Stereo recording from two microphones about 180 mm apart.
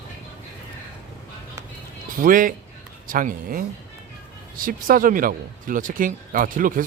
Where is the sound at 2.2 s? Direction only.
50° right (ahead or behind).